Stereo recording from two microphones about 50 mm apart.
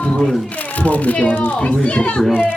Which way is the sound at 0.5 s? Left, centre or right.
Left.